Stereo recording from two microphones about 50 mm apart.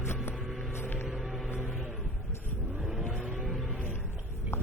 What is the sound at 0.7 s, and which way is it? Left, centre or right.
Music, left.